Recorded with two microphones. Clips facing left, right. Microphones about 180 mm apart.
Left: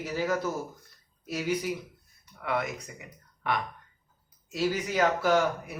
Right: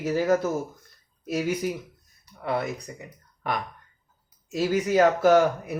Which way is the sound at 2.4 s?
35° right (ahead or behind).